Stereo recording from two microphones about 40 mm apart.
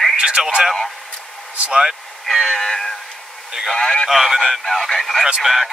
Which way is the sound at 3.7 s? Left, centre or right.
Centre.